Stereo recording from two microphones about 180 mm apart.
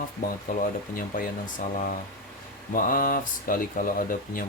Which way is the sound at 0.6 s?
50° left (ahead or behind).